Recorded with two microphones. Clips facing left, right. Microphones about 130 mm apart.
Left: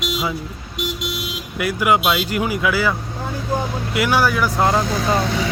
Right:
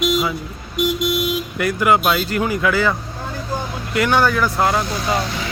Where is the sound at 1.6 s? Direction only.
10° left (ahead or behind).